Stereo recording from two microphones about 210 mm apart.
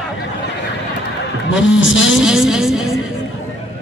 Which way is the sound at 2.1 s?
Centre (ahead or behind).